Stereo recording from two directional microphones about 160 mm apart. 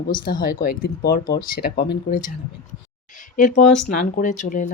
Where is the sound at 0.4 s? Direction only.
65° left (ahead or behind).